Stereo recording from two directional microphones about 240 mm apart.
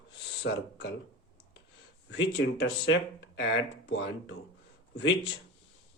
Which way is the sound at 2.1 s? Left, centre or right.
Left.